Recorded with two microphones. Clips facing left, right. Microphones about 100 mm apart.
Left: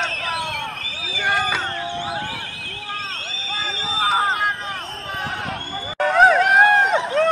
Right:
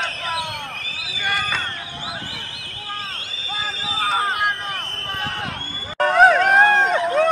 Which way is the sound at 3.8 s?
Centre (ahead or behind).